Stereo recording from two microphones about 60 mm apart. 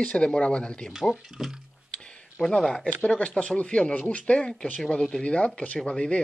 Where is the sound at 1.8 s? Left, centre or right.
Centre.